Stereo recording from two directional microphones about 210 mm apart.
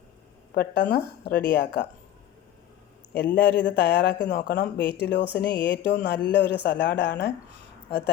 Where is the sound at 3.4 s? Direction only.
55° left (ahead or behind).